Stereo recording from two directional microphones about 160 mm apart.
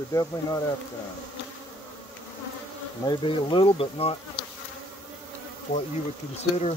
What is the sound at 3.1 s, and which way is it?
Speech, 30° left (ahead or behind).